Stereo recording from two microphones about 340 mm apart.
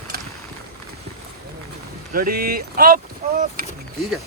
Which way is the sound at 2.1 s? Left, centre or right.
Right.